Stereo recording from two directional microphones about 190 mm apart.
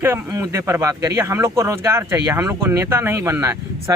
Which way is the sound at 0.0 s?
15° right (ahead or behind).